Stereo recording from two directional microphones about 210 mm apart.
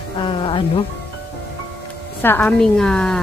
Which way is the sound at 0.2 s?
25° left (ahead or behind).